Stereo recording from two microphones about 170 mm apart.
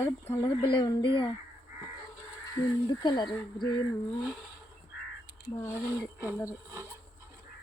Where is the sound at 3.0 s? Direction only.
25° left (ahead or behind).